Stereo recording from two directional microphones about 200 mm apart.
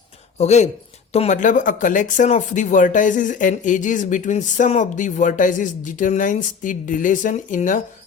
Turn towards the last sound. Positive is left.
turn(degrees=40)  # may be behind; listen again after turning